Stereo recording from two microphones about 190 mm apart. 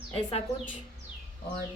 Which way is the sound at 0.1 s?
30° left (ahead or behind).